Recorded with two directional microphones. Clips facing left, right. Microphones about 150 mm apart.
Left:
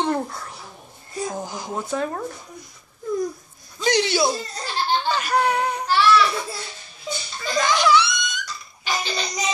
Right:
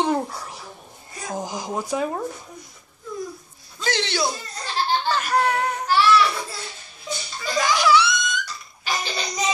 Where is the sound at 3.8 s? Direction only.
15° left (ahead or behind).